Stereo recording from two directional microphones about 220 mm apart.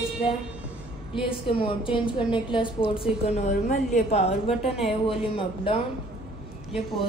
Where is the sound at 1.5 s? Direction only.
25° left (ahead or behind).